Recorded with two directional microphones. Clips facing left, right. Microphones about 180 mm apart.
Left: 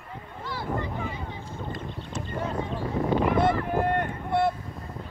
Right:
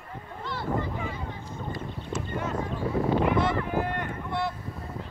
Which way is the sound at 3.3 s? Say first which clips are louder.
Left 2 dB; 55° left (ahead or behind).